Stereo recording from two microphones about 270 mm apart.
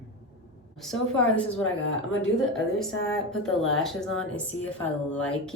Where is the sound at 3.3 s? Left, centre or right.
Centre.